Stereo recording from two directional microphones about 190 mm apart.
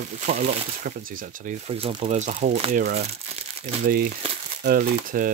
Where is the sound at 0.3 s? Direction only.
35° right (ahead or behind).